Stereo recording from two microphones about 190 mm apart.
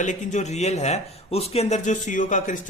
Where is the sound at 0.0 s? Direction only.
40° left (ahead or behind).